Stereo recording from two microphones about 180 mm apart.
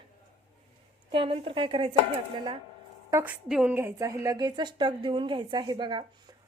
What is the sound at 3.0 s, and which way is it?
Speech, 15° right (ahead or behind).